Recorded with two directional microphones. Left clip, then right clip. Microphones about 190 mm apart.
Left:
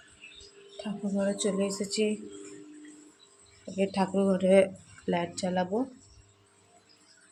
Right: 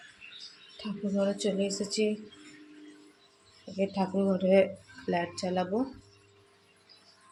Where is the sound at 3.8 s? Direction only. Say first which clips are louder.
Left 2 dB; 10° left (ahead or behind).